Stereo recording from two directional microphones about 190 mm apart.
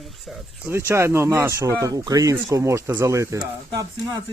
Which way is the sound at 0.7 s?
15° right (ahead or behind).